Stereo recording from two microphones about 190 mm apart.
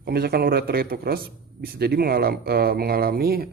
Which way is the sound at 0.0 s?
55° right (ahead or behind).